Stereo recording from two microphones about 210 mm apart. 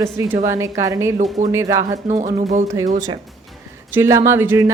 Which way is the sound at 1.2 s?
35° right (ahead or behind).